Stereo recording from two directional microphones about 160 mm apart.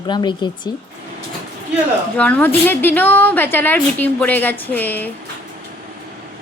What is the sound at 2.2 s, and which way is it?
A woman's voice, 10° left (ahead or behind).